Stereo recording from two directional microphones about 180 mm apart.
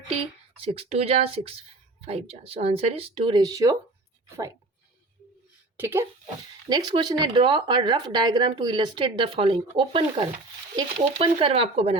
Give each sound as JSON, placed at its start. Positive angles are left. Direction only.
{"t": 0.5, "sound": "speech", "side_deg": -30}
{"t": 5.7, "sound": "speech", "side_deg": -10}
{"t": 6.7, "sound": "speech", "side_deg": -25}